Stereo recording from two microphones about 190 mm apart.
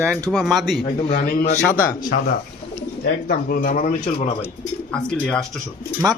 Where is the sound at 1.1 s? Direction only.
50° left (ahead or behind).